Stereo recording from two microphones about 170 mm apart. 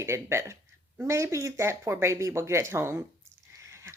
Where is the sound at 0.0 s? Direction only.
15° right (ahead or behind).